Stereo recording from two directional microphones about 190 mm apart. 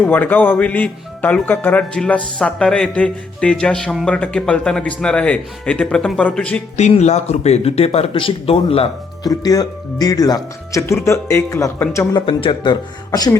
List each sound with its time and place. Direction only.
0.0 s speech: 10° left (ahead or behind)
6.7 s speech: 35° left (ahead or behind)
9.2 s speech: 20° left (ahead or behind)
12.2 s speech: 25° left (ahead or behind)